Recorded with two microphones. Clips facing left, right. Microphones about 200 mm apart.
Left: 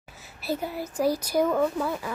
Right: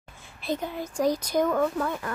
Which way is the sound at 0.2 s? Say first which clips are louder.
Even; 5° left (ahead or behind).